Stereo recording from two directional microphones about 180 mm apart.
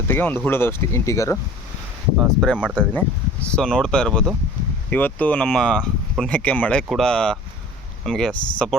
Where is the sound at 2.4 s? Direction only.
5° left (ahead or behind).